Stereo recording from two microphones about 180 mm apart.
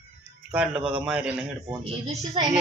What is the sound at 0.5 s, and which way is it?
Speech, 5° right (ahead or behind).